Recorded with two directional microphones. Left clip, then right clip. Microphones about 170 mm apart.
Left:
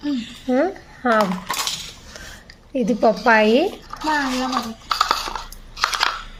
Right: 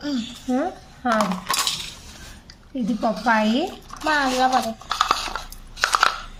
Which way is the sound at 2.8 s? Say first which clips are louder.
Left 5 dB; 35° left (ahead or behind).